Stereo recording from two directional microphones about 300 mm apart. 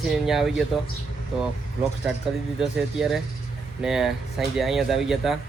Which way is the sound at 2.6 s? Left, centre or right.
Centre.